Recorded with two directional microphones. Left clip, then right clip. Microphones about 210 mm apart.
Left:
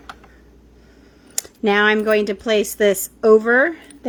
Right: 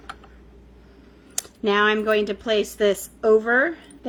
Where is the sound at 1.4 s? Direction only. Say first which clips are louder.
Left 3 dB; 40° left (ahead or behind).